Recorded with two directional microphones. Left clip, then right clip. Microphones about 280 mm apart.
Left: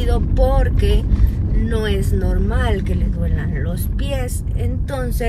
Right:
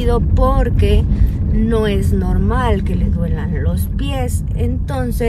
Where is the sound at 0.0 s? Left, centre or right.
Centre.